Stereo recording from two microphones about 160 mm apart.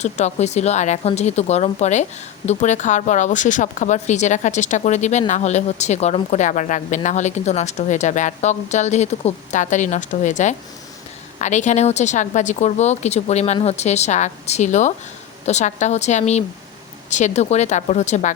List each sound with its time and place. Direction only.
0.0 s a woman's voice: 45° left (ahead or behind)